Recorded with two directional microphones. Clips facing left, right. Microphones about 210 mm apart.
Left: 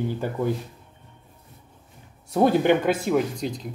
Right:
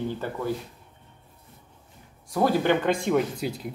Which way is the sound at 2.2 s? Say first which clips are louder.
Left 4 dB; 25° left (ahead or behind).